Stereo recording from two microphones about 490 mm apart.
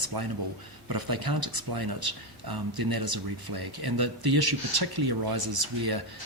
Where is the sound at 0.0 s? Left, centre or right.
Right.